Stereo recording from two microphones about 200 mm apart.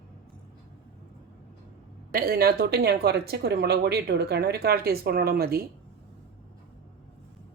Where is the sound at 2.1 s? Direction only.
50° right (ahead or behind).